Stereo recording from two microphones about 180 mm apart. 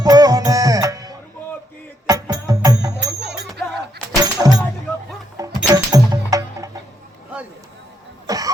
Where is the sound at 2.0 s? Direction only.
20° right (ahead or behind).